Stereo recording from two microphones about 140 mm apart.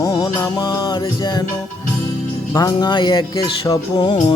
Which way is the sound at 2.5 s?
30° left (ahead or behind).